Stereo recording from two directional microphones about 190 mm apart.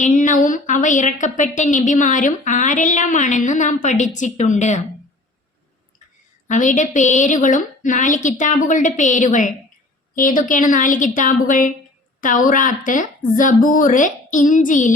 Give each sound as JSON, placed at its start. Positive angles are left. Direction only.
{"t": 0.0, "sound": "a woman's voice", "side_deg": 40}
{"t": 6.5, "sound": "a woman's voice", "side_deg": 40}